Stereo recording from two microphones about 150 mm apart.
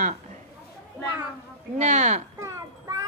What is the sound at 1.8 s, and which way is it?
Speech, 50° right (ahead or behind).